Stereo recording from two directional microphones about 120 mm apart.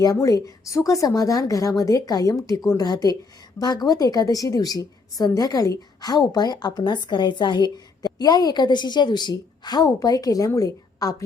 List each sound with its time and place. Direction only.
0.0 s a woman's voice: 30° left (ahead or behind)